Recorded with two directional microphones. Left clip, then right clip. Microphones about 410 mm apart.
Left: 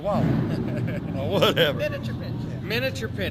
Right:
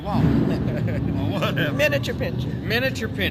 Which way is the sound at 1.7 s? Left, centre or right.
Right.